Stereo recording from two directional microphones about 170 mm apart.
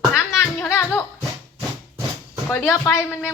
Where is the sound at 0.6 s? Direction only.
15° left (ahead or behind).